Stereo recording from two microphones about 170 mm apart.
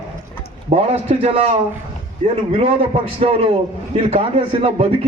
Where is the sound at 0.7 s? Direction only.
35° right (ahead or behind).